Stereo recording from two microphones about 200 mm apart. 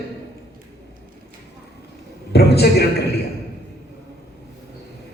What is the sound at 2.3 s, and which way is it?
Speech, 55° left (ahead or behind).